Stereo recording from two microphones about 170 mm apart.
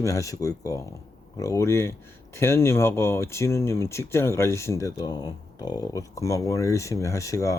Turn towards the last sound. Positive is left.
turn(degrees=20)  # may be behind; listen again after turning